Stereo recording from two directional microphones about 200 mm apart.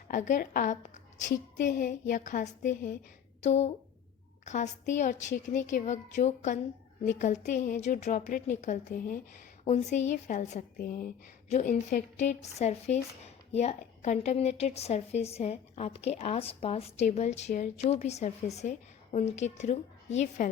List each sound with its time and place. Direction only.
0.1 s a woman's voice: 40° left (ahead or behind)
10.8 s a woman's voice: 45° left (ahead or behind)